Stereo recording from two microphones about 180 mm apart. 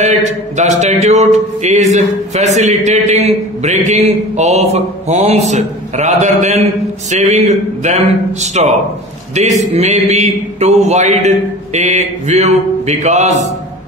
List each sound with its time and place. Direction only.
0.6 s a man's voice: 40° right (ahead or behind)